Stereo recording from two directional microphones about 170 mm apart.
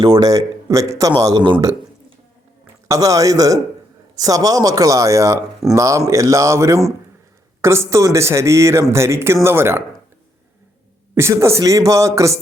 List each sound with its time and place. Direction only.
0.0 s speech: 20° right (ahead or behind)
2.8 s speech: 20° right (ahead or behind)
11.1 s speech: 15° right (ahead or behind)